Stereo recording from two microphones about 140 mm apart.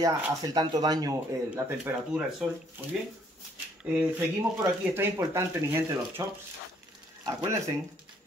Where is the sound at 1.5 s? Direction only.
10° right (ahead or behind).